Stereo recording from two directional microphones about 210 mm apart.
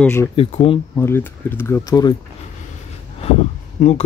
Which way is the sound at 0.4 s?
30° left (ahead or behind).